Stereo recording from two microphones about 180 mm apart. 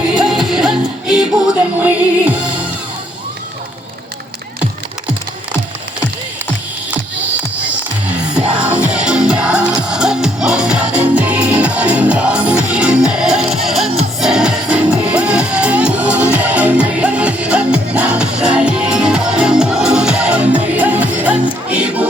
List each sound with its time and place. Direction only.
0.1 s music: 5° right (ahead or behind)
8.8 s music: 5° right (ahead or behind)